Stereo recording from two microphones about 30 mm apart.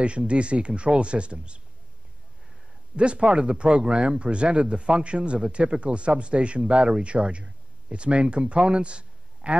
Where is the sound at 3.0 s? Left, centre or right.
Right.